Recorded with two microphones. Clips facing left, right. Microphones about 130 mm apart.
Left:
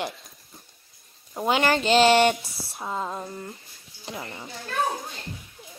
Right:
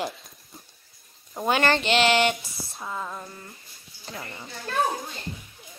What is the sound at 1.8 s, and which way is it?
Speech, 40° left (ahead or behind).